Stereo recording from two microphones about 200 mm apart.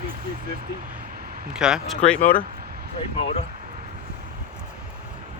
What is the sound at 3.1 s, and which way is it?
Speech, 30° left (ahead or behind).